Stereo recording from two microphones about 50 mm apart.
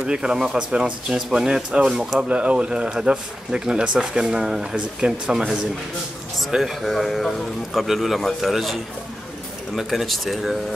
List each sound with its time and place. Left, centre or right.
0.0 s speech: centre
6.5 s a man's voice: centre
9.8 s a man's voice: centre